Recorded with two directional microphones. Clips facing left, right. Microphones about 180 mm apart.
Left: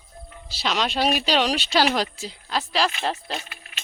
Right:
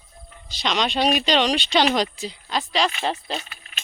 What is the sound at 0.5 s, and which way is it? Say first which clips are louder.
Speech: right 1 dB; 5° left (ahead or behind).